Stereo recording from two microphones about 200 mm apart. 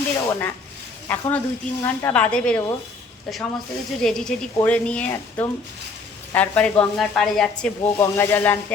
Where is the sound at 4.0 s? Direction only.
5° left (ahead or behind).